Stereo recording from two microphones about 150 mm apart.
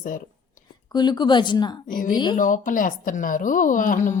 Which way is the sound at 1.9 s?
65° left (ahead or behind).